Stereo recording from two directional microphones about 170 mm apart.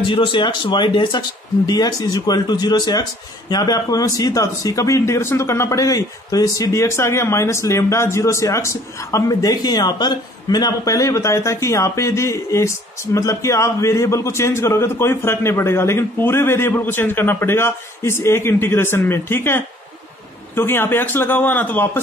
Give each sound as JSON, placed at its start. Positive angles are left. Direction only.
{"t": 0.0, "sound": "a man's voice", "side_deg": 30}